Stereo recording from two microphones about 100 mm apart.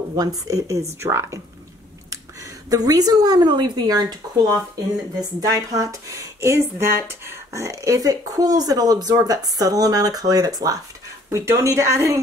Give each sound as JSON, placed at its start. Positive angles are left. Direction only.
{"t": 0.1, "sound": "speech", "side_deg": -35}
{"t": 2.7, "sound": "speech", "side_deg": -40}
{"t": 5.5, "sound": "speech", "side_deg": -35}